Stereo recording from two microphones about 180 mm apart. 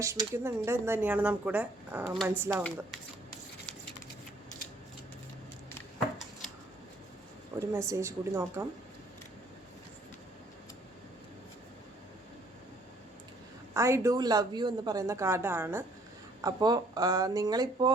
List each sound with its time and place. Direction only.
0.0 s speech: 15° right (ahead or behind)
7.7 s speech: 15° right (ahead or behind)
13.7 s speech: 15° right (ahead or behind)